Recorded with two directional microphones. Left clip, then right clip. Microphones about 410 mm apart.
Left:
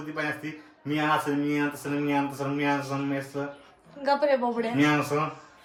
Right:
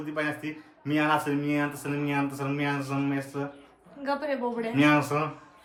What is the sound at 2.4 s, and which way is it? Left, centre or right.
Speech, centre.